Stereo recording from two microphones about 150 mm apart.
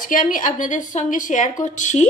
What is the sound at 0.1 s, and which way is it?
A woman's voice, 65° left (ahead or behind).